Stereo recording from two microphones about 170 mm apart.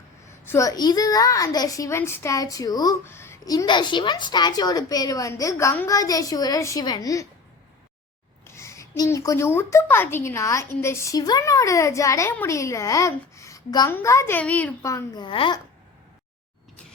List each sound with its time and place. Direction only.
0.4 s a child's voice: 15° left (ahead or behind)
8.4 s a woman's voice: 15° left (ahead or behind)